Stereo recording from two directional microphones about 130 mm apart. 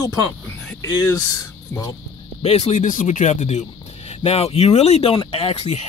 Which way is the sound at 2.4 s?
55° left (ahead or behind).